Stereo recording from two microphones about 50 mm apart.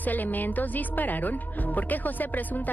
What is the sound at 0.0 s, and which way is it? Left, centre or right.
A man's voice, left.